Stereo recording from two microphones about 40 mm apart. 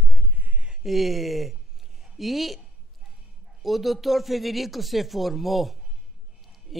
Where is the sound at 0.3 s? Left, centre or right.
Right.